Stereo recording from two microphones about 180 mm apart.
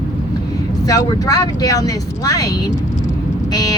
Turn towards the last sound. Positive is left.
turn(degrees=20)  # may be behind; listen again after turning